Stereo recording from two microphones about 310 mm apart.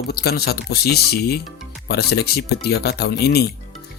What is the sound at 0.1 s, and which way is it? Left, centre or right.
Speech, left.